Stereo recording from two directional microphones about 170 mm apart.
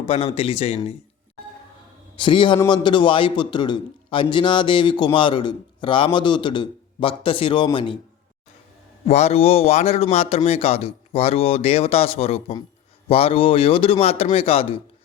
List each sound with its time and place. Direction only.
0.0 s speech: 35° left (ahead or behind)
2.1 s a man's voice: 30° left (ahead or behind)
9.0 s speech: 40° left (ahead or behind)